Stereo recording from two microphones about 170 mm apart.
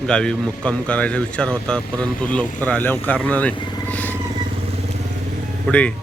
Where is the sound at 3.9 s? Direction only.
10° left (ahead or behind).